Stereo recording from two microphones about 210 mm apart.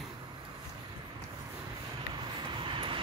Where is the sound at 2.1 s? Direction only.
25° right (ahead or behind).